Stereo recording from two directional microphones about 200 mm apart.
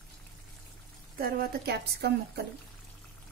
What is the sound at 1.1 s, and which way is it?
A woman's voice, 50° right (ahead or behind).